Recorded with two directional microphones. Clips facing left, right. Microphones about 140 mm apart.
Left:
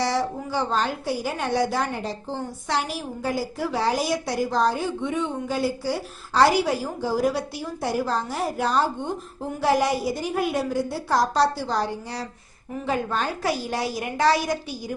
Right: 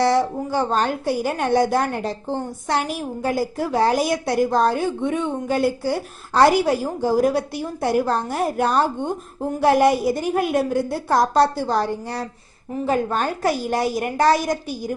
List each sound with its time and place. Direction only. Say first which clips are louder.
0.0 s a woman's voice: right 6 dB; 55° right (ahead or behind)